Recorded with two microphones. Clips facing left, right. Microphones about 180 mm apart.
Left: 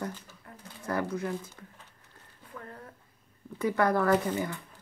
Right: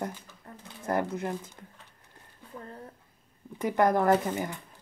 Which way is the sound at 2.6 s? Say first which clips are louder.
Right 2 dB; 25° right (ahead or behind).